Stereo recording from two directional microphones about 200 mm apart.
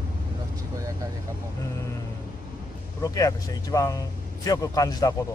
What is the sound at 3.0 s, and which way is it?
A man's voice, 15° left (ahead or behind).